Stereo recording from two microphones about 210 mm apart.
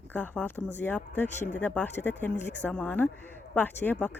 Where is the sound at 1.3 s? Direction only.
35° left (ahead or behind).